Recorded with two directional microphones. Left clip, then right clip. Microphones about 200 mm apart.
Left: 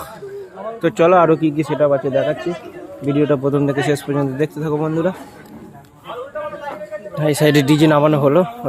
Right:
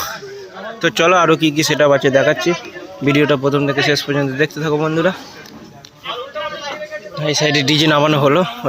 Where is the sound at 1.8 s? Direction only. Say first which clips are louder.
Right 3 dB; 15° right (ahead or behind).